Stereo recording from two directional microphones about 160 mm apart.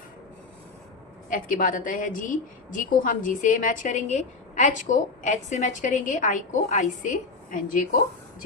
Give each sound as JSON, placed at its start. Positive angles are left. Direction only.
{"t": 1.3, "sound": "a woman's voice", "side_deg": 60}